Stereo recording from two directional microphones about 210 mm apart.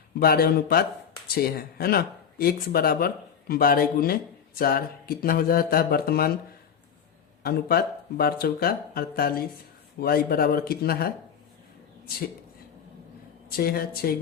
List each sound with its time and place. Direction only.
0.2 s speech: 45° left (ahead or behind)
7.4 s speech: 45° left (ahead or behind)
13.5 s speech: 45° left (ahead or behind)